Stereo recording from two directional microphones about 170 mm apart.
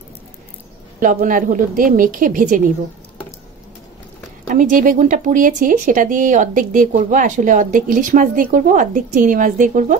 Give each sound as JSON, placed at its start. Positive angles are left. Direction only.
{"t": 0.9, "sound": "speech", "side_deg": -50}
{"t": 4.5, "sound": "speech", "side_deg": -50}